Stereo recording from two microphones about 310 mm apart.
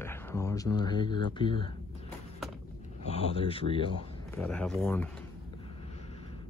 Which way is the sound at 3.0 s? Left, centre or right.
Centre.